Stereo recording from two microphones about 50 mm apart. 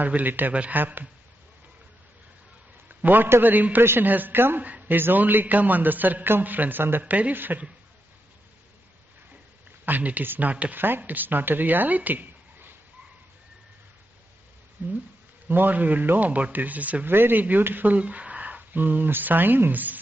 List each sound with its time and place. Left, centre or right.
0.0 s a man's voice: right
3.0 s a man's voice: right
7.1 s speech: right
7.3 s a man's voice: right
9.8 s a man's voice: right
10.8 s speech: right
14.8 s a man's voice: right
17.0 s speech: right
17.9 s speech: right